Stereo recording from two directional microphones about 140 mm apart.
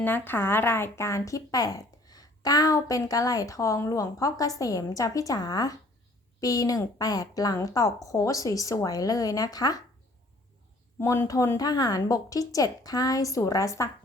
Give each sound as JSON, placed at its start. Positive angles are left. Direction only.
{"t": 0.0, "sound": "speech", "side_deg": 15}
{"t": 11.0, "sound": "speech", "side_deg": 20}